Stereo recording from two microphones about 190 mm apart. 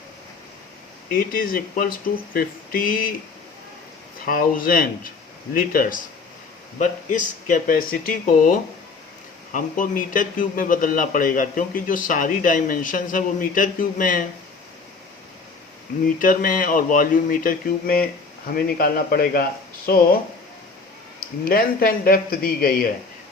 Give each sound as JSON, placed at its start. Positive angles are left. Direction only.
{"t": 1.1, "sound": "a man's voice", "side_deg": 50}
{"t": 4.3, "sound": "a man's voice", "side_deg": 50}
{"t": 16.2, "sound": "a man's voice", "side_deg": 45}
{"t": 21.2, "sound": "a man's voice", "side_deg": 50}